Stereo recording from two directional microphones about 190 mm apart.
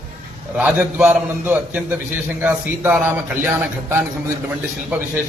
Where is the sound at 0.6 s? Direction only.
5° right (ahead or behind).